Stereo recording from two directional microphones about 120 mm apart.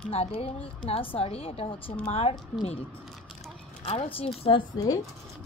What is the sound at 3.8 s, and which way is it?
Speech, 55° left (ahead or behind).